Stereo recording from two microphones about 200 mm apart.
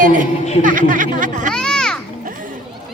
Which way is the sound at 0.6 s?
40° right (ahead or behind).